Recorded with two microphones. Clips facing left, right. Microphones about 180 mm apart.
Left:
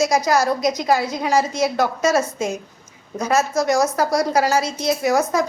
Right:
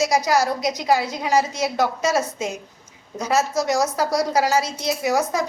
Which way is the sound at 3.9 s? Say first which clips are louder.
Left 2 dB; 15° right (ahead or behind).